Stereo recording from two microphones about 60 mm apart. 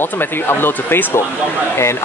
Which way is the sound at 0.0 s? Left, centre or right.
Left.